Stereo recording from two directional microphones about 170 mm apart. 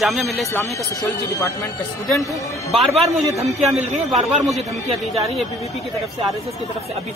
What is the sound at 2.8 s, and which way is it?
Speech, centre (ahead or behind).